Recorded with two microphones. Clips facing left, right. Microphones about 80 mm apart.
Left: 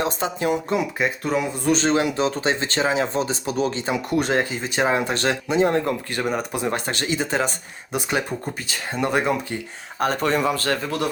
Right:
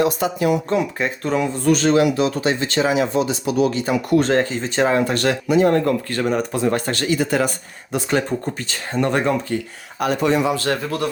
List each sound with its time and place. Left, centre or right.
0.0 s speech: left
0.7 s speech: centre
1.6 s speech: left
4.3 s speech: centre
7.9 s speech: centre
10.0 s speech: left